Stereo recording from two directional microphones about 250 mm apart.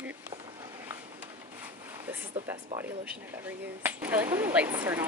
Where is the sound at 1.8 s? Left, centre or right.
Centre.